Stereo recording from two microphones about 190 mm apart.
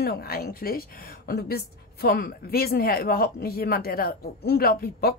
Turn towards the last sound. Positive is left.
turn(degrees=50)  # may be behind; listen again after turning